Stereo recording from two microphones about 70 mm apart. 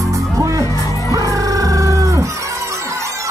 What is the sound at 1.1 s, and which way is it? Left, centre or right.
Dog, right.